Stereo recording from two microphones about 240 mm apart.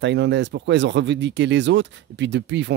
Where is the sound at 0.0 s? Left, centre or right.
Right.